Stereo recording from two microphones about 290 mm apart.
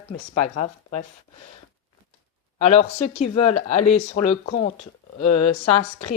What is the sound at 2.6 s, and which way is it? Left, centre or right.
A woman's voice, left.